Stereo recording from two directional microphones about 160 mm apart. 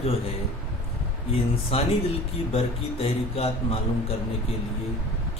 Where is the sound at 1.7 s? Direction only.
40° left (ahead or behind).